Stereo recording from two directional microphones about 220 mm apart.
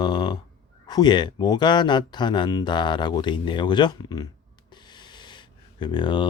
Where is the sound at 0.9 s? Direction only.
20° left (ahead or behind).